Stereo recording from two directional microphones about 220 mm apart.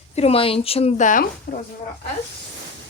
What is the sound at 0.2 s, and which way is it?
Speech, 25° left (ahead or behind).